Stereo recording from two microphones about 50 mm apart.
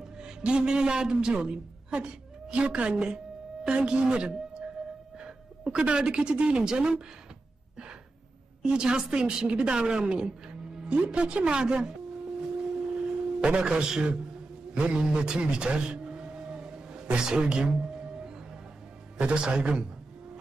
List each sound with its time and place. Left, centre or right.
0.2 s a woman's voice: centre
8.6 s a woman's voice: centre
13.0 s a man's voice: centre
19.1 s a man's voice: right